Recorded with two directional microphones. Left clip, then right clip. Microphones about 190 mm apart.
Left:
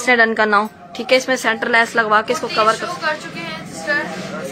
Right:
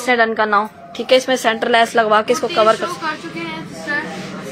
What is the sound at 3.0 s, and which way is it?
Female singing, 50° left (ahead or behind).